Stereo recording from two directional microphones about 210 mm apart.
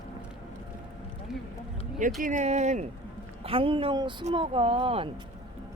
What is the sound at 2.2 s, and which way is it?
Speech, 35° right (ahead or behind).